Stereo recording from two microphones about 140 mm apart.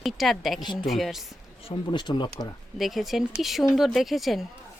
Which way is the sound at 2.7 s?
Centre (ahead or behind).